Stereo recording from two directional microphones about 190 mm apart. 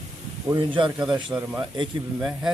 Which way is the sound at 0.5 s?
25° right (ahead or behind).